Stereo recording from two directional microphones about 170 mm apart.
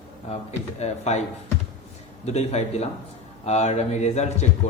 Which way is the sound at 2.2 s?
40° left (ahead or behind).